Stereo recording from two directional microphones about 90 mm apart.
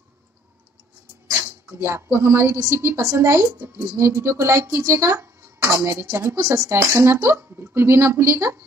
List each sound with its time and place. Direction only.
1.3 s speech: 30° right (ahead or behind)